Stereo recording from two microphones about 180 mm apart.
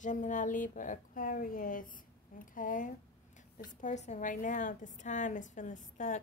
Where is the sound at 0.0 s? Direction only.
45° left (ahead or behind).